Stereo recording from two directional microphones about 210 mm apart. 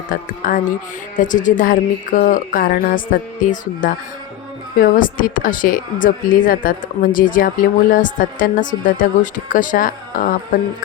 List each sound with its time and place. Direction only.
0.1 s speech: 40° left (ahead or behind)